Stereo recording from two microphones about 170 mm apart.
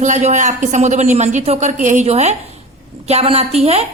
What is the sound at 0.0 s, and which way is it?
A man's voice, 45° right (ahead or behind).